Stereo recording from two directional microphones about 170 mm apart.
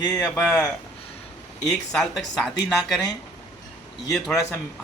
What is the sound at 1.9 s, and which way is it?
Speech, 5° left (ahead or behind).